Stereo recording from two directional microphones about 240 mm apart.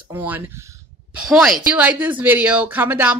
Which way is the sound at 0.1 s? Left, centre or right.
Centre.